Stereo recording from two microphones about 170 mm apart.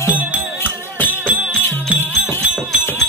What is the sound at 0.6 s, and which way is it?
Music, 10° left (ahead or behind).